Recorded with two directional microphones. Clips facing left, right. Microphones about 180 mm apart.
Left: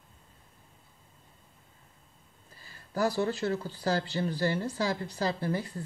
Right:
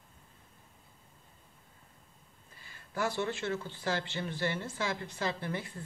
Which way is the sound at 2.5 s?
35° left (ahead or behind).